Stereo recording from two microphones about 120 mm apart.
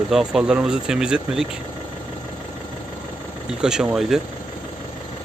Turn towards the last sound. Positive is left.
turn(degrees=0)  # may be behind; listen again after turning